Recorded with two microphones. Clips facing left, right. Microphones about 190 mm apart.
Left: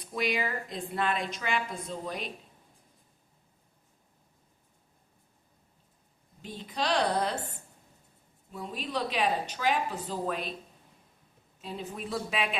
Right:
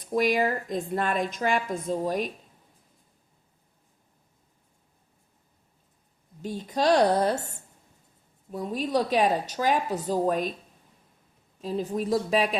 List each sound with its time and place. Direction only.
0.1 s a woman's voice: 45° right (ahead or behind)
6.4 s a woman's voice: 45° right (ahead or behind)
8.5 s a woman's voice: 40° right (ahead or behind)
11.6 s speech: 35° right (ahead or behind)